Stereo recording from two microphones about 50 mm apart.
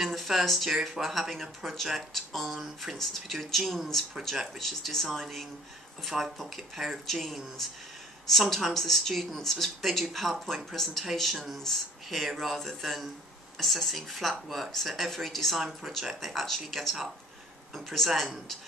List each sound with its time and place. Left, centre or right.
0.0 s speech: centre